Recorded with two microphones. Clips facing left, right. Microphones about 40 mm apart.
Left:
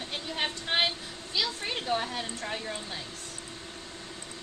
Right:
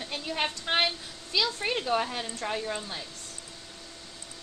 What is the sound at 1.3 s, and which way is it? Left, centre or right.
A woman's voice, right.